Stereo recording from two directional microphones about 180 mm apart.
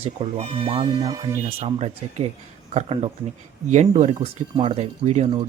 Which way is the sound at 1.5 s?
35° right (ahead or behind).